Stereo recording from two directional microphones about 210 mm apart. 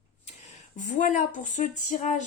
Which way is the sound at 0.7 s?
40° left (ahead or behind).